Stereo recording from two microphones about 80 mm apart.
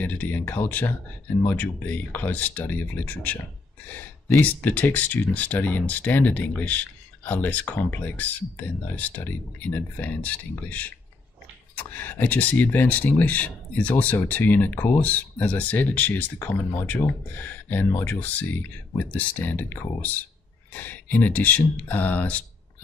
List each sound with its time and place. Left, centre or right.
0.0 s speech: left